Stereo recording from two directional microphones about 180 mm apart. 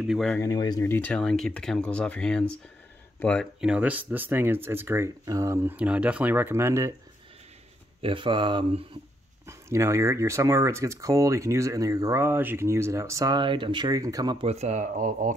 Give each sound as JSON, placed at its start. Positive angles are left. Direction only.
{"t": 0.0, "sound": "speech", "side_deg": 0}
{"t": 0.4, "sound": "speech", "side_deg": 20}
{"t": 3.6, "sound": "speech", "side_deg": -5}
{"t": 8.0, "sound": "speech", "side_deg": -30}
{"t": 9.5, "sound": "speech", "side_deg": -15}
{"t": 14.5, "sound": "speech", "side_deg": -40}